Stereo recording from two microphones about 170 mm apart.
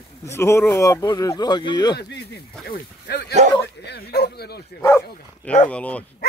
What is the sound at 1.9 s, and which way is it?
Speech, 80° left.